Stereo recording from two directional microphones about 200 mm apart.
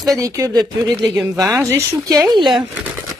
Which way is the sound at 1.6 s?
15° right (ahead or behind).